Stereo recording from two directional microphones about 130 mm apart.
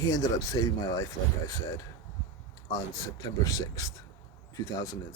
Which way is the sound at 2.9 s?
25° left (ahead or behind).